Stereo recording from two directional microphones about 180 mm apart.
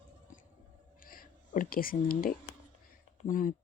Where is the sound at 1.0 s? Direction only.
50° left (ahead or behind).